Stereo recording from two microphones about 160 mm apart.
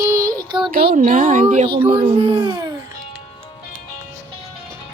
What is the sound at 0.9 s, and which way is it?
Speech, 55° right (ahead or behind).